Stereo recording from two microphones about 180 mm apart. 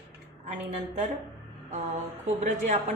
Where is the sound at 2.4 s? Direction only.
40° right (ahead or behind).